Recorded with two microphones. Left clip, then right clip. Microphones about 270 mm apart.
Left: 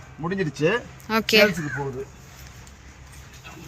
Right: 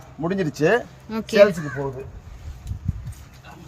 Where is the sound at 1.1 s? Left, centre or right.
Centre.